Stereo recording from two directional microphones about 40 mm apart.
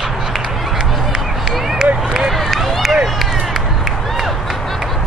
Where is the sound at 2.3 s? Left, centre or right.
Centre.